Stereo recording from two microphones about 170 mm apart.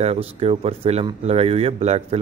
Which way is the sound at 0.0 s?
35° right (ahead or behind).